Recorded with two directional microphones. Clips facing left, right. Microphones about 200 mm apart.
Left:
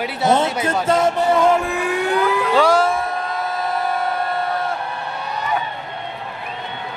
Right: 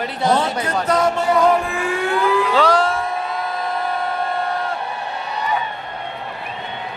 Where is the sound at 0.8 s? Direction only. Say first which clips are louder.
Left 1 dB; 25° left (ahead or behind).